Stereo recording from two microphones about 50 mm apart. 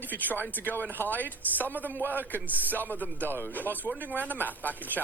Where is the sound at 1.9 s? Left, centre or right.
Right.